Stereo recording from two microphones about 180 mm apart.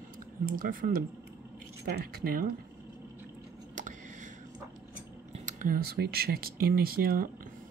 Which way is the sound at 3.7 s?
45° right (ahead or behind).